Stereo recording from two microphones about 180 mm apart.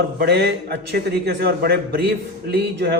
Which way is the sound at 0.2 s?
65° right (ahead or behind).